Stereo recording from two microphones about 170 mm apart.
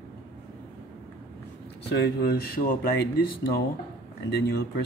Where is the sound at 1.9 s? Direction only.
65° left (ahead or behind).